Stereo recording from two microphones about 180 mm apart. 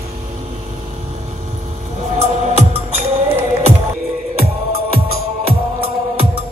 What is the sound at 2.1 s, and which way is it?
Music, 35° right (ahead or behind).